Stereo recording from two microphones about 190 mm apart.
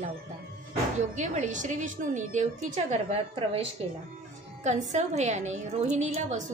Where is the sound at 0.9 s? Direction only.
40° right (ahead or behind).